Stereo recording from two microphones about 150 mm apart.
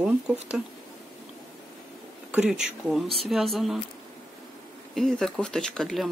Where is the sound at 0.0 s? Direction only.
10° right (ahead or behind).